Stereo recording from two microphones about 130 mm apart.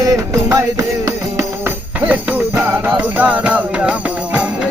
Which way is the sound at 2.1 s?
10° right (ahead or behind).